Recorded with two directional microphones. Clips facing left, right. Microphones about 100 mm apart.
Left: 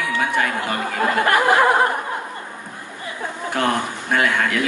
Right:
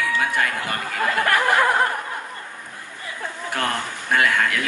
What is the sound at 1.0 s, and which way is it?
Speech, 20° left (ahead or behind).